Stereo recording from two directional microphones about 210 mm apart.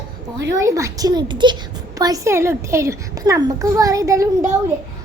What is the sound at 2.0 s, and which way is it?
A child's voice, 15° right (ahead or behind).